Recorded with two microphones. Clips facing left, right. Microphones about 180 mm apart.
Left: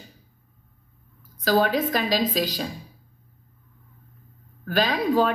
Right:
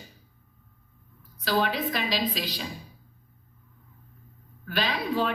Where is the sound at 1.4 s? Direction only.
45° left (ahead or behind).